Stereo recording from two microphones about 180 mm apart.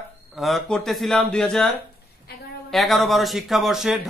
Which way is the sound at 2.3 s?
60° left (ahead or behind).